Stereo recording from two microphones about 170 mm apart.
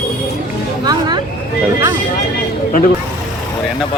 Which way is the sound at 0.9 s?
25° right (ahead or behind).